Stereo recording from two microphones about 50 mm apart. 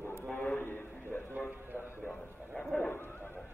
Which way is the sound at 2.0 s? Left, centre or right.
Centre.